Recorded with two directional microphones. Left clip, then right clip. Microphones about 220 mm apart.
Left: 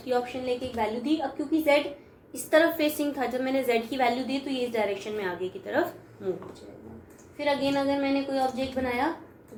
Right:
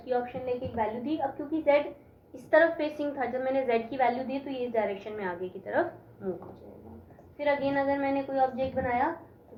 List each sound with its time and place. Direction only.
0.1 s a woman's voice: 45° left (ahead or behind)
7.3 s a woman's voice: 45° left (ahead or behind)